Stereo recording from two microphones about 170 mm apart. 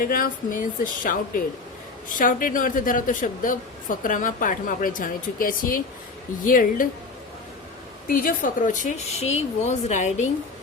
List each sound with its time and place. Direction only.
0.0 s a woman's voice: 55° left (ahead or behind)
8.0 s a woman's voice: 55° left (ahead or behind)